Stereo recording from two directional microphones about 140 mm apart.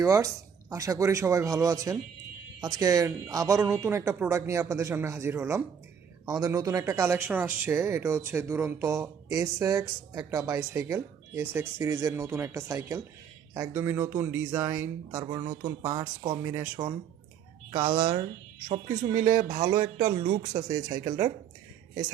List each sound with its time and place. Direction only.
0.0 s speech: 25° right (ahead or behind)
15.1 s speech: 30° right (ahead or behind)
19.3 s speech: 70° right (ahead or behind)
19.5 s speech: 30° right (ahead or behind)
20.5 s speech: 45° right (ahead or behind)
21.0 s speech: 30° right (ahead or behind)